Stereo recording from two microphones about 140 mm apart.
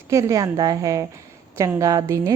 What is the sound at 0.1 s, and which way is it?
A woman's voice, 25° right (ahead or behind).